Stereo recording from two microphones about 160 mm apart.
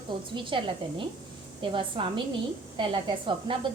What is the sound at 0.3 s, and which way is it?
A woman's voice, 30° right (ahead or behind).